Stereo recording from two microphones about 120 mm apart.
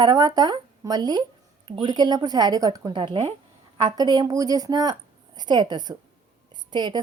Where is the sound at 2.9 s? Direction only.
40° right (ahead or behind).